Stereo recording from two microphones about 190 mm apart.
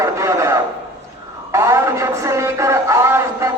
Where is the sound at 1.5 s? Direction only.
15° right (ahead or behind).